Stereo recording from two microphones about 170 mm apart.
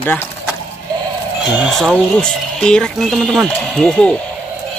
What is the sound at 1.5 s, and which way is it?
Speech, centre (ahead or behind).